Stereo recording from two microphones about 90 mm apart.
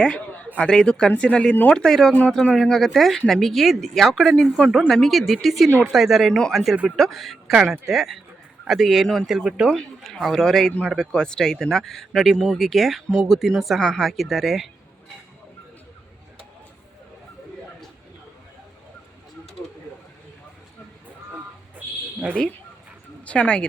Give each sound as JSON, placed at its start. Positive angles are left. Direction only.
{"t": 0.0, "sound": "speech", "side_deg": 15}
{"t": 1.7, "sound": "speech", "side_deg": 5}
{"t": 9.6, "sound": "speech", "side_deg": 5}
{"t": 21.8, "sound": "a sound", "side_deg": -20}
{"t": 23.2, "sound": "speech", "side_deg": 15}